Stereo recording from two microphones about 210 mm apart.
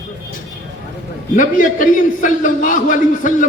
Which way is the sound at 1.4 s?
40° left (ahead or behind).